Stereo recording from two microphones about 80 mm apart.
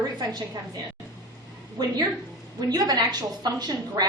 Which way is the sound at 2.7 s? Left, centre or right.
Right.